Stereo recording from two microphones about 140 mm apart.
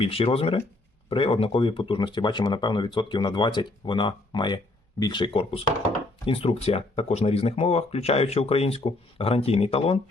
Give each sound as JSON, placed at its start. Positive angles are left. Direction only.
{"t": 0.0, "sound": "speech", "side_deg": 40}